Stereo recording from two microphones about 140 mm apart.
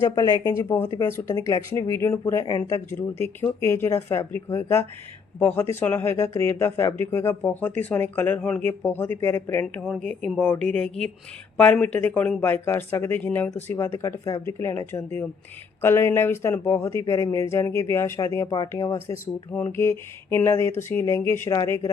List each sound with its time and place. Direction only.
0.0 s speech: 25° left (ahead or behind)
9.8 s speech: 5° left (ahead or behind); by 21.8 s 25° left (ahead or behind)